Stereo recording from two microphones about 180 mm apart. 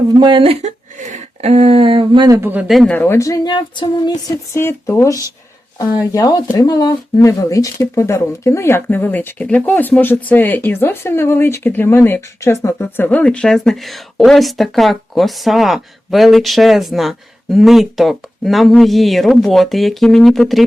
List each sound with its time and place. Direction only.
0.1 s speech: 25° right (ahead or behind); by 20.7 s centre (ahead or behind)